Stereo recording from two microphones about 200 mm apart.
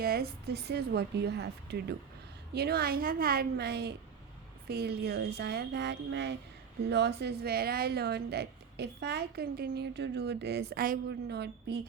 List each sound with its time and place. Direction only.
0.0 s a woman's voice: 50° right (ahead or behind)